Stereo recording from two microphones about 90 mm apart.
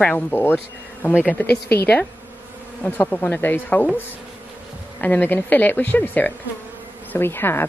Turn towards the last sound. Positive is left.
turn(degrees=25)  # may be behind; listen again after turning